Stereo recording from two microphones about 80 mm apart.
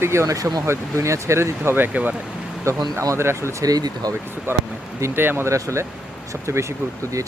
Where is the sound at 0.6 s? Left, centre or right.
Right; by 2.1 s centre.